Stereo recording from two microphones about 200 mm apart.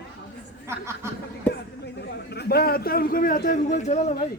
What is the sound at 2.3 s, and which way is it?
A man's voice, 55° left (ahead or behind).